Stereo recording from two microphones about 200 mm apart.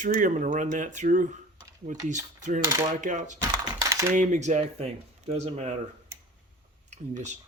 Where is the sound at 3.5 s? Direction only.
15° right (ahead or behind).